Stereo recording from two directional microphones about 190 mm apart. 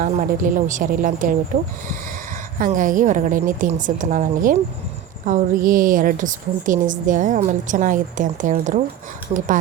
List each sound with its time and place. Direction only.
0.0 s a woman's voice: 45° right (ahead or behind)
2.6 s a woman's voice: 45° right (ahead or behind)